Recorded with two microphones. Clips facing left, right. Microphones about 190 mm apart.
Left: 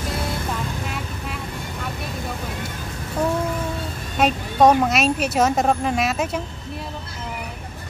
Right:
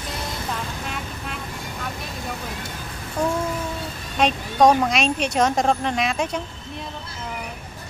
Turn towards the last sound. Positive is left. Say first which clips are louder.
# left 1 dB
turn(degrees=5)  # may be behind; listen again after turning